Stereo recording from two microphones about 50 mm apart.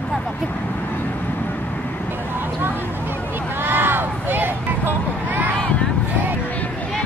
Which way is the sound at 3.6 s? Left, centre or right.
Right.